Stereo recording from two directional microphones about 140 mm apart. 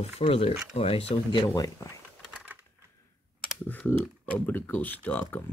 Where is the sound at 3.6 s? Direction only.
10° left (ahead or behind).